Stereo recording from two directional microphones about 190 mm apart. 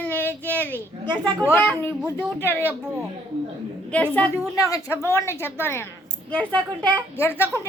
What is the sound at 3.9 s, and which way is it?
Speech, 5° left (ahead or behind).